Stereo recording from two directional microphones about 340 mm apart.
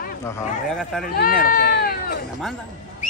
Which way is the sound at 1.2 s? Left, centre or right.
Left.